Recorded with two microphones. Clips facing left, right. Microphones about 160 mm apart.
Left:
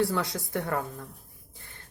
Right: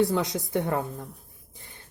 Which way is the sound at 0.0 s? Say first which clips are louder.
Right 3 dB; 20° right (ahead or behind).